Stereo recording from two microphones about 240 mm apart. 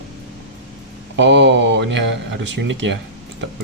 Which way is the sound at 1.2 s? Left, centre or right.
Right.